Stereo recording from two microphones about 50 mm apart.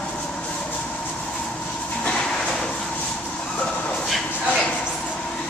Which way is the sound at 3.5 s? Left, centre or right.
Left.